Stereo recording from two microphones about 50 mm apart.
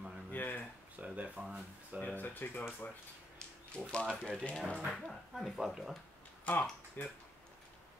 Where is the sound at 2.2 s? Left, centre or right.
Left.